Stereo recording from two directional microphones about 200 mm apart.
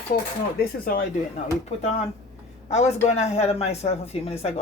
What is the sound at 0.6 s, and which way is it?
Speech, 45° left (ahead or behind).